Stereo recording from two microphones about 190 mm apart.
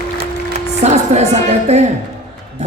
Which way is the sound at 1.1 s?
35° right (ahead or behind).